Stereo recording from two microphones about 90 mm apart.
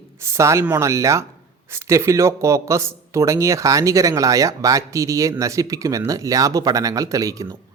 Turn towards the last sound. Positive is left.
turn(degrees=-40)  # may be behind; listen again after turning